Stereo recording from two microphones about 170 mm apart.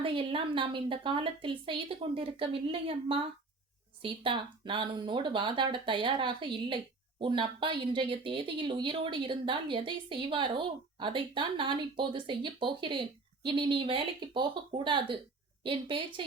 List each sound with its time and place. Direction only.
0.0 s a woman's voice: 30° right (ahead or behind)